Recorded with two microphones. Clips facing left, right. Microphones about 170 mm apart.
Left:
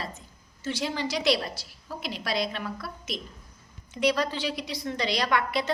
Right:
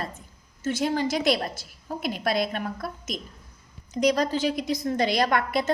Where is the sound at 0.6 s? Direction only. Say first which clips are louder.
Right 5 dB; 50° right (ahead or behind).